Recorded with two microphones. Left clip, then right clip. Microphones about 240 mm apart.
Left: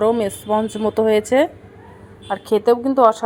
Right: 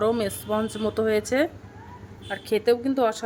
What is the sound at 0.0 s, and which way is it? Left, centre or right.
Speech, centre.